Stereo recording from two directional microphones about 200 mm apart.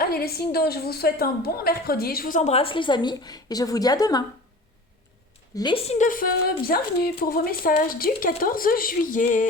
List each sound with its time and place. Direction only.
0.0 s a woman's voice: 50° left (ahead or behind); by 4.2 s 20° left (ahead or behind)
5.5 s a woman's voice: 25° left (ahead or behind); by 9.5 s 40° left (ahead or behind)